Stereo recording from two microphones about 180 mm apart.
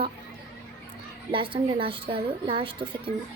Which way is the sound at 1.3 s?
30° right (ahead or behind).